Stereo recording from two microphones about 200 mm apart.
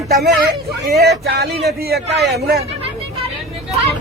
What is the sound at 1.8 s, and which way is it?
Speech, 50° right (ahead or behind).